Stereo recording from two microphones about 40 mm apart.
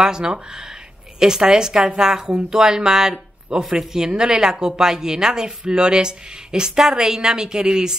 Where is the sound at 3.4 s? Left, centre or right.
Right.